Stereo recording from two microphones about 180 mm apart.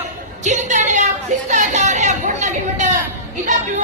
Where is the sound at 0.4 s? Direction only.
40° right (ahead or behind).